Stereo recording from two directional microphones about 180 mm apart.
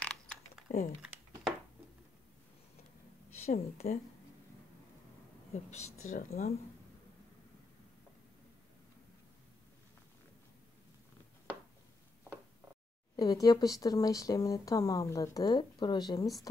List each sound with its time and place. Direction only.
0.0 s typing: 5° left (ahead or behind)
3.4 s speech: 35° left (ahead or behind)
5.5 s speech: 40° left (ahead or behind)
6.1 s speech: 55° left (ahead or behind)
13.1 s speech: 20° left (ahead or behind)